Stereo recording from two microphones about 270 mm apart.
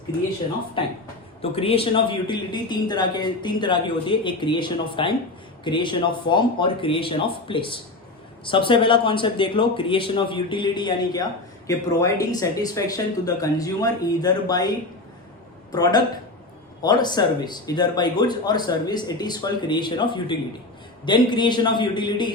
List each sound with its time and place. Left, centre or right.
0.8 s speech: centre
15.7 s speech: centre